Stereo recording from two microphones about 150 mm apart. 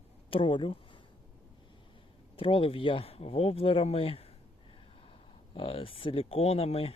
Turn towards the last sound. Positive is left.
turn(degrees=40)  # may be behind; listen again after turning